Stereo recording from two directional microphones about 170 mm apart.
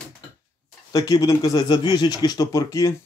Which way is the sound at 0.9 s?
20° left (ahead or behind).